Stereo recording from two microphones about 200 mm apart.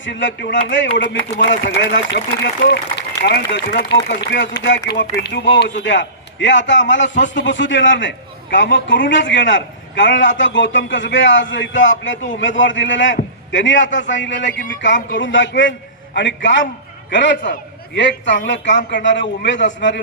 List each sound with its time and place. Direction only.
0.0 s a man's voice: 65° left (ahead or behind)